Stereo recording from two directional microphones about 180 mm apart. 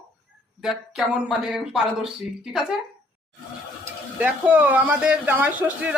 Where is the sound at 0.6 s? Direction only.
5° right (ahead or behind).